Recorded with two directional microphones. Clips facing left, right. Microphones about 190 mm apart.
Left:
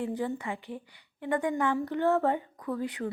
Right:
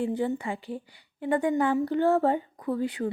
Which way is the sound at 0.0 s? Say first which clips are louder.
Right 4 dB; 25° right (ahead or behind).